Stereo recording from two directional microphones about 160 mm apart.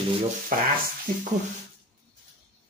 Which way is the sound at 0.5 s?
60° right (ahead or behind).